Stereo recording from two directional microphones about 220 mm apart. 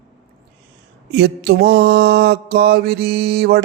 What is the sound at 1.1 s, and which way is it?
Mantra, 50° right (ahead or behind).